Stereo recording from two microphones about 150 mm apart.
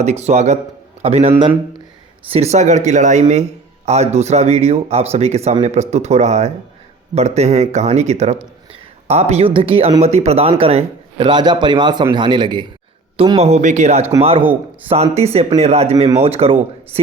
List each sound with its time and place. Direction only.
0.0 s speech: 45° right (ahead or behind)
2.3 s speech: 45° right (ahead or behind)